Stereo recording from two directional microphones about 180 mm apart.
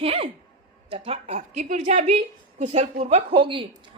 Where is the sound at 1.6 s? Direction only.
45° right (ahead or behind).